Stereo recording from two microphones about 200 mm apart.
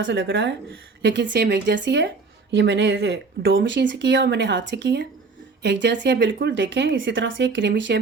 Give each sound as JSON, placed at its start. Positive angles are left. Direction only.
{"t": 0.0, "sound": "speech", "side_deg": -65}